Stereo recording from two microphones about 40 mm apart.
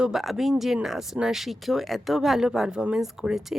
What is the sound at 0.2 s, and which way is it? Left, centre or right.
Speech, centre.